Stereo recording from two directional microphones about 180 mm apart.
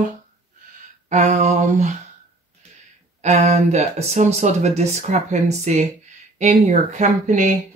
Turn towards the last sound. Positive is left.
turn(degrees=-45)  # may be behind; listen again after turning